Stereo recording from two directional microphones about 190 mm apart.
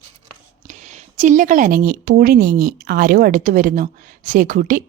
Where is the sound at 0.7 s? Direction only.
40° right (ahead or behind).